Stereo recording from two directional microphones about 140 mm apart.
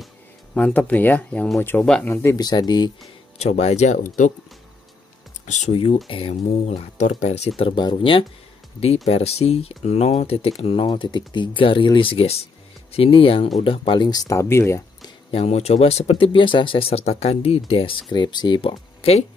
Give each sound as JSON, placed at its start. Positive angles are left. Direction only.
{"t": 0.6, "sound": "speech", "side_deg": 10}
{"t": 2.4, "sound": "speech", "side_deg": 30}
{"t": 3.3, "sound": "speech", "side_deg": 50}
{"t": 5.5, "sound": "speech", "side_deg": 55}
{"t": 6.0, "sound": "speech", "side_deg": 40}
{"t": 15.3, "sound": "speech", "side_deg": 50}
{"t": 18.1, "sound": "speech", "side_deg": 30}